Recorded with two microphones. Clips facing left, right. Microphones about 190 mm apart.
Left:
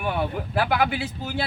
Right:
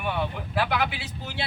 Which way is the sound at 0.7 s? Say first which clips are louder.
Left 5 dB; 50° left (ahead or behind).